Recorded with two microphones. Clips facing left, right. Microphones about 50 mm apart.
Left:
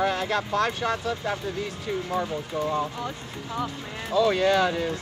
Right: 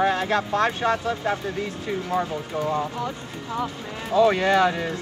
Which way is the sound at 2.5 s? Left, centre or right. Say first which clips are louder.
Right 2 dB; right.